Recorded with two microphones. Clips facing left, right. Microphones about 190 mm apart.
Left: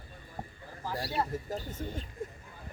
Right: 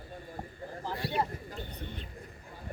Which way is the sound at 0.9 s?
40° left (ahead or behind).